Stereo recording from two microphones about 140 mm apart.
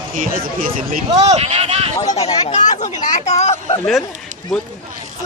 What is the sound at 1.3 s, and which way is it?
Speech, 50° right (ahead or behind).